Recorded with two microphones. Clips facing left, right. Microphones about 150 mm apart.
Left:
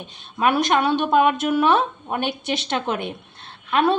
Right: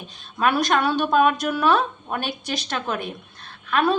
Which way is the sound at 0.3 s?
20° left (ahead or behind).